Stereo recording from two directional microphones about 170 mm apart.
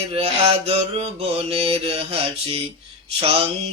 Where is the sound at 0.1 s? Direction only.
35° right (ahead or behind).